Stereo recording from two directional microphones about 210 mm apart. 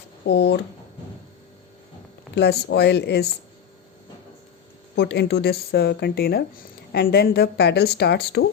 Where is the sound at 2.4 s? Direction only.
50° left (ahead or behind).